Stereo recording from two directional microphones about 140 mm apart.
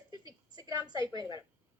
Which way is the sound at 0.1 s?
25° right (ahead or behind).